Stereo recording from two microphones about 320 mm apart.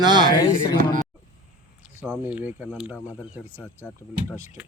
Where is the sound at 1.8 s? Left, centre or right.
Centre.